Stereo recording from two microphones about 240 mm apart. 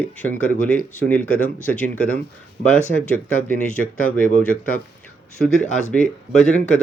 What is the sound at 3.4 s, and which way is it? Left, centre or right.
Speech, centre.